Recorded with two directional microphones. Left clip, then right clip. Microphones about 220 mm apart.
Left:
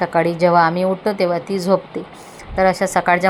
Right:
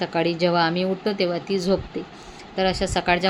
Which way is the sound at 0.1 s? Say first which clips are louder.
Left 7 dB; 15° right (ahead or behind).